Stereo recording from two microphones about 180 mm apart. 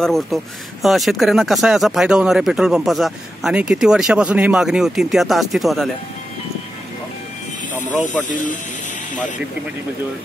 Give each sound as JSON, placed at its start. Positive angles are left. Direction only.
{"t": 0.0, "sound": "speech", "side_deg": 0}
{"t": 8.3, "sound": "speech", "side_deg": 45}